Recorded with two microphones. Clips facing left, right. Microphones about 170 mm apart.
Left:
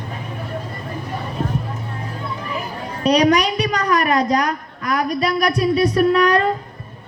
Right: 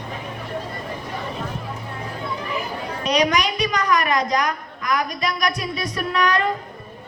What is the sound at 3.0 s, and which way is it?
A woman's voice, 35° left (ahead or behind).